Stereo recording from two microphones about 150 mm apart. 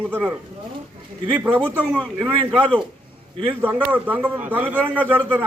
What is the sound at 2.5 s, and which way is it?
Speech, 10° left (ahead or behind).